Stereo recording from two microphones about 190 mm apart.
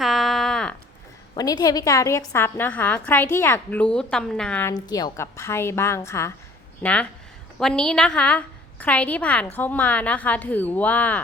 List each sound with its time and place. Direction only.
0.0 s a sound: centre (ahead or behind)
1.4 s a woman's voice: 20° left (ahead or behind)
4.7 s a woman's voice: 20° left (ahead or behind)